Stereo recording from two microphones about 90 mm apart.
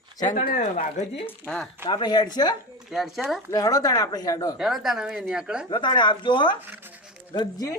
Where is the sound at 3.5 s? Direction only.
45° left (ahead or behind).